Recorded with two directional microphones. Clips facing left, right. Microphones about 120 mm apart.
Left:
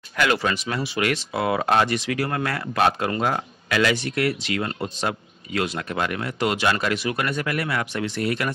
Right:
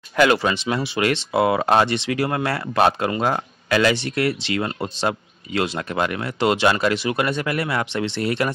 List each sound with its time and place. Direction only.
0.2 s speech: 25° right (ahead or behind)